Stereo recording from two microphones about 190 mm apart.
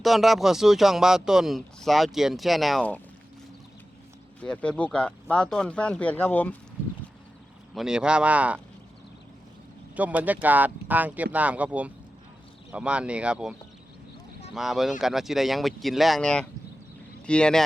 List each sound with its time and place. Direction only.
0.0 s speech: centre (ahead or behind)
4.4 s speech: 5° left (ahead or behind)
7.8 s speech: 5° right (ahead or behind)
9.9 s speech: 10° right (ahead or behind)